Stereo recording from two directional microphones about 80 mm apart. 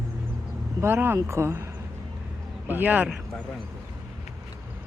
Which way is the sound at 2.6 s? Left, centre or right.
Right.